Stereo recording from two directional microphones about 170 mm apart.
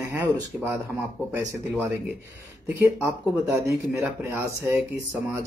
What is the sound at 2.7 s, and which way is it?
Speech, 15° right (ahead or behind).